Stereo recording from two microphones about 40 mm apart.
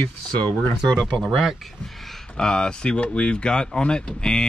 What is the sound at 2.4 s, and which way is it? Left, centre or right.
Speech, centre.